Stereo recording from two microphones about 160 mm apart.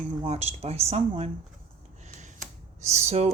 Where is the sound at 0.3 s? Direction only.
40° right (ahead or behind).